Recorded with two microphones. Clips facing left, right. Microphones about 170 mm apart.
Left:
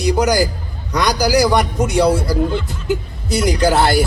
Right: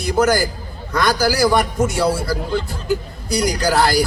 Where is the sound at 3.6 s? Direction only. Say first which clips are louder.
Left 3 dB; 25° left (ahead or behind).